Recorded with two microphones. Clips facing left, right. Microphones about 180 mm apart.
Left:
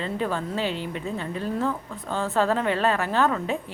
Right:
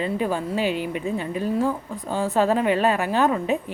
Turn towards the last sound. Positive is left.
turn(degrees=-15)  # may be behind; listen again after turning